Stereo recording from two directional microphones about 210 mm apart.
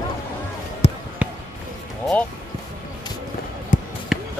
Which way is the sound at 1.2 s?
5° right (ahead or behind).